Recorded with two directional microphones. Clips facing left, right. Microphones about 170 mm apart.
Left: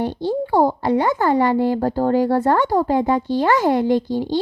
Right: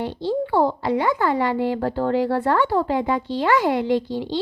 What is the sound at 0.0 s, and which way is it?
Speech, 40° left (ahead or behind).